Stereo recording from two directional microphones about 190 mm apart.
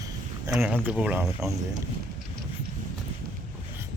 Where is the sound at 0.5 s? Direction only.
Centre (ahead or behind).